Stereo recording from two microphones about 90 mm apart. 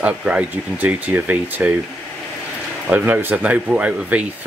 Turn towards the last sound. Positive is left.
turn(degrees=-15)  # may be behind; listen again after turning